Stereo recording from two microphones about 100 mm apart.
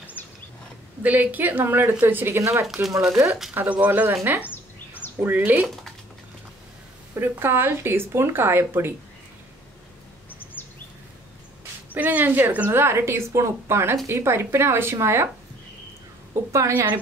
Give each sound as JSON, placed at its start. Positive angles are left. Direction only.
{"t": 1.0, "sound": "speech", "side_deg": -15}
{"t": 2.6, "sound": "speech", "side_deg": 0}
{"t": 3.5, "sound": "speech", "side_deg": -15}
{"t": 4.5, "sound": "a sound", "side_deg": 20}
{"t": 5.2, "sound": "speech", "side_deg": -20}
{"t": 7.2, "sound": "speech", "side_deg": -20}
{"t": 11.9, "sound": "speech", "side_deg": -15}
{"t": 16.5, "sound": "speech", "side_deg": -25}